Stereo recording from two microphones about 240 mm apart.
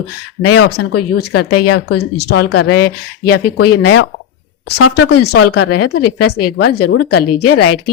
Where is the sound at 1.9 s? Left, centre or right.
Left.